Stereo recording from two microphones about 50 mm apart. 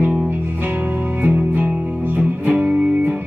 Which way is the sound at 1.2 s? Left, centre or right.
Right.